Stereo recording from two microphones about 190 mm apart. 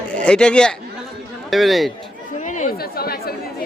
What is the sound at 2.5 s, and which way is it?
Chatter, 40° left (ahead or behind).